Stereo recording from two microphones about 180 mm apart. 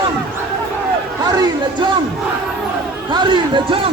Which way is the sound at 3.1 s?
25° right (ahead or behind).